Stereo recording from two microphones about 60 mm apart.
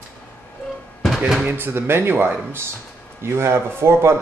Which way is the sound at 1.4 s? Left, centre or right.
Right.